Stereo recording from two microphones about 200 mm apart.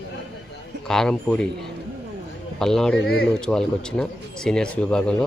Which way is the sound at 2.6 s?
Centre (ahead or behind).